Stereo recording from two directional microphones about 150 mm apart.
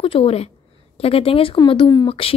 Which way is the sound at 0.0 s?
40° left (ahead or behind).